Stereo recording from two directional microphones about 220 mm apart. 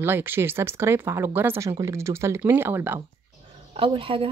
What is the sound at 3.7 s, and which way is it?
Speech, 25° right (ahead or behind).